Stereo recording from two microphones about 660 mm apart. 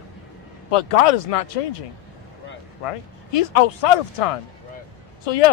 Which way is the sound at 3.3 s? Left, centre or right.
Left.